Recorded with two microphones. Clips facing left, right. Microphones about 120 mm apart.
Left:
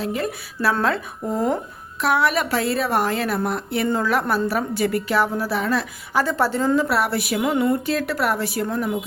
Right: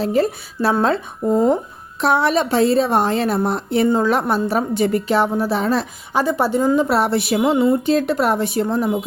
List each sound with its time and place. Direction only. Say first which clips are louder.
0.0 s a woman's voice: right 7 dB; 30° right (ahead or behind)
6.2 s a woman's voice: right 5 dB; 15° right (ahead or behind)